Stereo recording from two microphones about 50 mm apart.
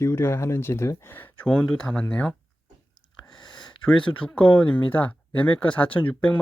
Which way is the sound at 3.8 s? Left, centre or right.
Left.